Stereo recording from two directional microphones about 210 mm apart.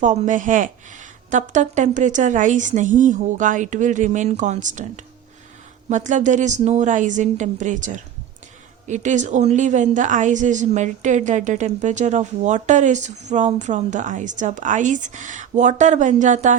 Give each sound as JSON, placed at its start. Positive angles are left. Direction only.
{"t": 0.0, "sound": "speech", "side_deg": -35}